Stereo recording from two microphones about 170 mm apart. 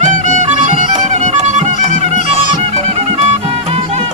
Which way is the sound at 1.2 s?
45° right (ahead or behind).